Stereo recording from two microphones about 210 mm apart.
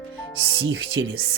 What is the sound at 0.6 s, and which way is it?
Speech, 70° right (ahead or behind).